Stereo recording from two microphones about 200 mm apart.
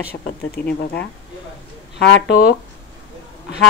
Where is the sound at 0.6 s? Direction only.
50° left (ahead or behind).